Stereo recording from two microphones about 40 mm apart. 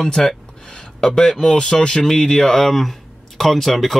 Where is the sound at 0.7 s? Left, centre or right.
Centre.